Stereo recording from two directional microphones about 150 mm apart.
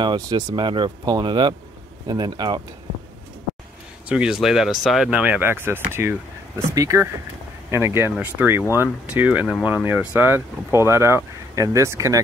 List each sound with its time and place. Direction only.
0.0 s speech: 30° right (ahead or behind)
4.1 s speech: 5° right (ahead or behind)